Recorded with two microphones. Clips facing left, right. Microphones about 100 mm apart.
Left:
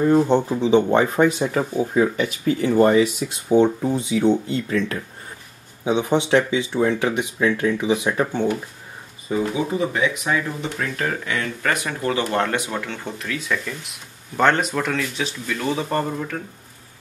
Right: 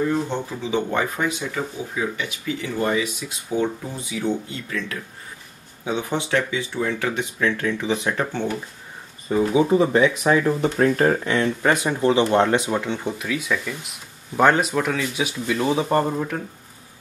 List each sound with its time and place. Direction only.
0.3 s speech: 30° left (ahead or behind)
5.9 s speech: 20° left (ahead or behind)
9.3 s speech: centre (ahead or behind)
9.7 s speech: 35° right (ahead or behind); by 16.3 s 15° right (ahead or behind)